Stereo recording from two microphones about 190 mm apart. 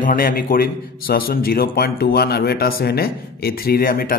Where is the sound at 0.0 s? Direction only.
50° left (ahead or behind).